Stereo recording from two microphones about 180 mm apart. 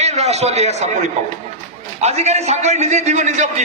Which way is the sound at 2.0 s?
35° right (ahead or behind).